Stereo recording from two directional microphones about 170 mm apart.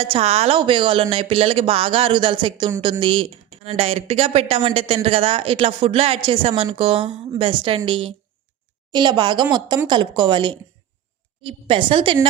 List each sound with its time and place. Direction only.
0.0 s speech: 35° right (ahead or behind)